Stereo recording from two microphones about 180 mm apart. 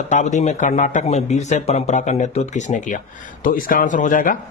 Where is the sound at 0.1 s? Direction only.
40° left (ahead or behind).